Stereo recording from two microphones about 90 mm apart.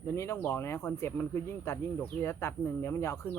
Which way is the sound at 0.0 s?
30° left (ahead or behind).